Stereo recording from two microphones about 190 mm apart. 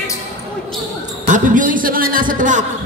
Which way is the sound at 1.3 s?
45° right (ahead or behind).